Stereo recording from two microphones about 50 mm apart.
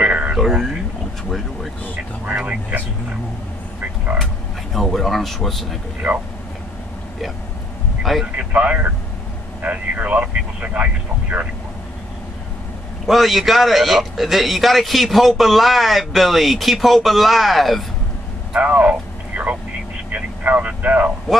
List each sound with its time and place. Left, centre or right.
0.0 s a sound: right
0.4 s a man's voice: centre
2.2 s speech: right
4.7 s a man's voice: centre
8.0 s speech: centre
8.4 s speech: right
13.0 s a man's voice: centre
18.5 s a sound: right
20.1 s vehicle: right